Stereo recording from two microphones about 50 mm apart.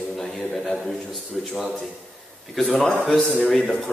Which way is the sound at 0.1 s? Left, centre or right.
Centre.